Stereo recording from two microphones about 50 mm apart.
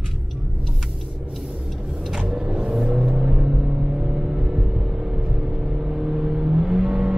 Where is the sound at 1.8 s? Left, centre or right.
Centre.